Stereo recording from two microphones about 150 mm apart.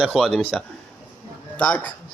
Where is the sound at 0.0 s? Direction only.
5° right (ahead or behind).